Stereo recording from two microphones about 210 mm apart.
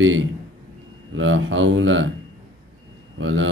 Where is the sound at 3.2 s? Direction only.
65° right (ahead or behind).